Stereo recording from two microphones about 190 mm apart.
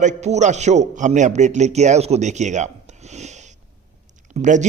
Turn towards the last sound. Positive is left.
turn(degrees=-40)  # may be behind; listen again after turning